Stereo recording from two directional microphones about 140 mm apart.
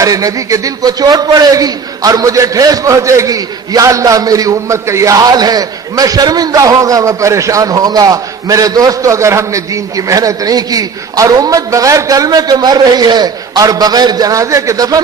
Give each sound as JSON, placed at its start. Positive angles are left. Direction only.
{"t": 0.0, "sound": "a man's voice", "side_deg": -25}